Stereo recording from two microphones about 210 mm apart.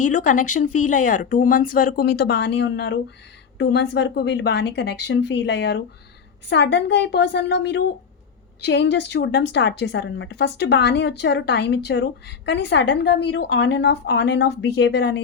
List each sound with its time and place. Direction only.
0.0 s a woman's voice: 40° left (ahead or behind); by 15.2 s 55° left (ahead or behind)